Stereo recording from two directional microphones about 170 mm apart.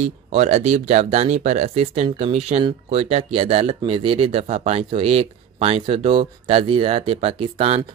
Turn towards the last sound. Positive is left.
turn(degrees=-35)  # may be behind; listen again after turning